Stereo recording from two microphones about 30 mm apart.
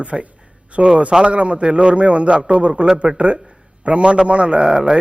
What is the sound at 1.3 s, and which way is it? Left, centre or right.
A woman's voice, right.